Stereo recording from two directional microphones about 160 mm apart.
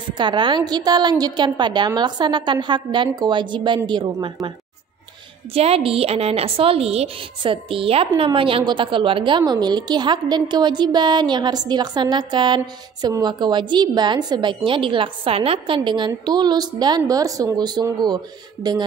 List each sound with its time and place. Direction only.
0.2 s a woman's voice: 30° right (ahead or behind)
5.5 s a woman's voice: 40° right (ahead or behind)